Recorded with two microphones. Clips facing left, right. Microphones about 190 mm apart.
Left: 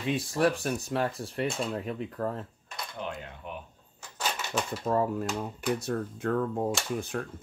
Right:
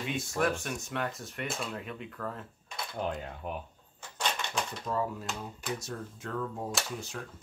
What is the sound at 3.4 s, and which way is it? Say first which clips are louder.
Speech: right 3 dB; 40° right (ahead or behind).